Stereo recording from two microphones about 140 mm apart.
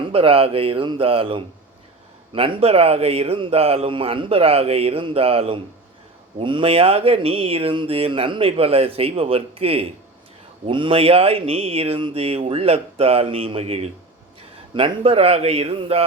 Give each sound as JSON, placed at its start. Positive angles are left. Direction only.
{"t": 0.0, "sound": "speech", "side_deg": -40}